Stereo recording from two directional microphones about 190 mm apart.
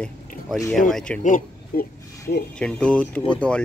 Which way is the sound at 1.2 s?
45° left (ahead or behind).